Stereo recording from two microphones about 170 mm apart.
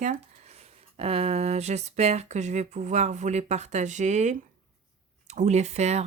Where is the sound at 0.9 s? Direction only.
35° right (ahead or behind).